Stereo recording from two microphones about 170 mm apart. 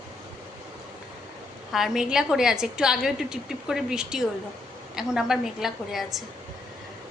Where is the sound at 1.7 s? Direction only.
Centre (ahead or behind).